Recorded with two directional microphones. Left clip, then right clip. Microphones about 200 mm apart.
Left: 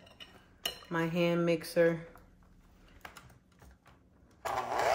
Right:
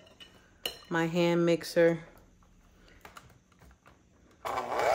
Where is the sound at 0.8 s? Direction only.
35° right (ahead or behind).